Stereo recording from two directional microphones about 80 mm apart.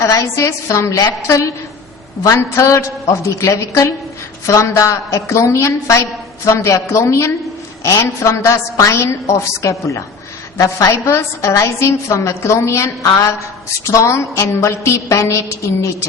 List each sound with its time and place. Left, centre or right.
0.0 s a woman's voice: left